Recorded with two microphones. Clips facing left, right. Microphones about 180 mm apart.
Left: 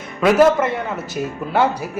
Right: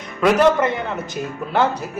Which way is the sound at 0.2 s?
5° left (ahead or behind).